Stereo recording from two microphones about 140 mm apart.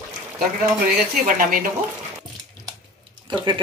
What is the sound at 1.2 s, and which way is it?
Speech, 85° right.